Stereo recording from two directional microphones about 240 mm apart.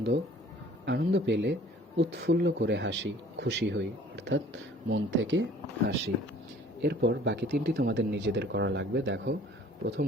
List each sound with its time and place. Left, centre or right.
0.9 s speech: right